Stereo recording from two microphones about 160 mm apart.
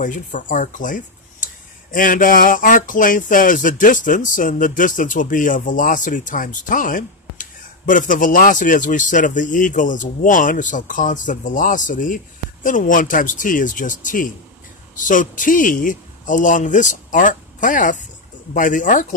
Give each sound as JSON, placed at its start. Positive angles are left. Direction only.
{"t": 0.0, "sound": "a man's voice", "side_deg": 55}